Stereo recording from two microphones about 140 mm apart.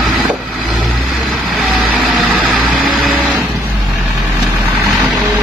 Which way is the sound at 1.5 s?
Centre (ahead or behind).